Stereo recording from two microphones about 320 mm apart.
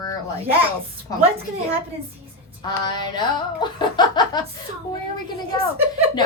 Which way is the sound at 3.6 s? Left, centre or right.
Centre.